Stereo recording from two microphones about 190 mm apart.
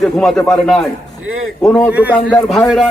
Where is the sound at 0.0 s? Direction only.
5° left (ahead or behind).